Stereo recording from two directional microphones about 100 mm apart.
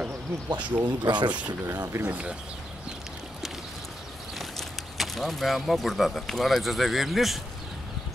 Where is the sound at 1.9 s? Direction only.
15° right (ahead or behind).